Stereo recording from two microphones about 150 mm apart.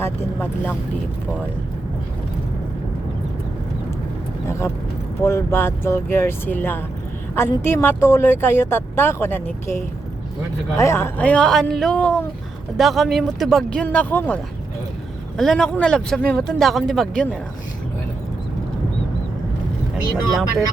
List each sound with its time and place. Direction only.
0.0 s speech: 10° left (ahead or behind)
5.2 s speech: 15° left (ahead or behind)
15.4 s speech: 5° left (ahead or behind)